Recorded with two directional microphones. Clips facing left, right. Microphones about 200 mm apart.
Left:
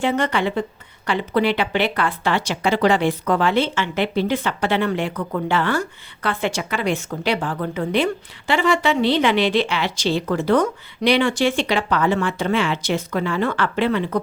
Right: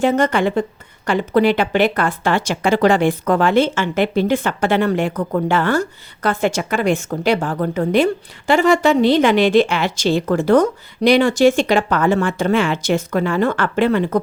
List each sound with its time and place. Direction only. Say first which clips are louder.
0.0 s speech: right 5 dB; 45° right (ahead or behind)